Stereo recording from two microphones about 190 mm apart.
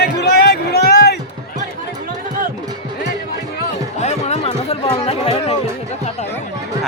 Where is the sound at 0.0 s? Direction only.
55° left (ahead or behind).